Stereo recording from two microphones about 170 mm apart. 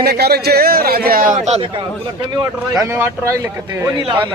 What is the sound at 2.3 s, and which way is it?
Speech, 20° right (ahead or behind).